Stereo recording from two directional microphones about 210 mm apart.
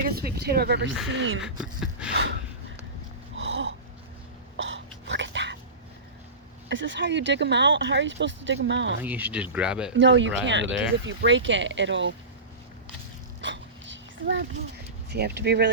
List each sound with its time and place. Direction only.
0.1 s speech: 45° right (ahead or behind)
1.6 s a sound: 5° right (ahead or behind)
2.1 s a sound: 55° right (ahead or behind)
3.3 s wheeze: 60° right (ahead or behind)
4.5 s dog: 60° right (ahead or behind)
6.7 s speech: 60° right (ahead or behind)
9.0 s speech: 10° right (ahead or behind)
10.0 s speech: 60° right (ahead or behind)
13.4 s dog: 60° right (ahead or behind)
15.1 s speech: 55° right (ahead or behind)